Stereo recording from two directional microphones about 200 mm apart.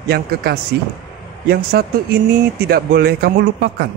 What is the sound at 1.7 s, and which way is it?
Speech, 50° right (ahead or behind).